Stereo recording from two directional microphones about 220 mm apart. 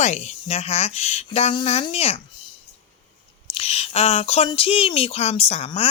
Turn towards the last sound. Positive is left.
turn(degrees=25)  # may be behind; listen again after turning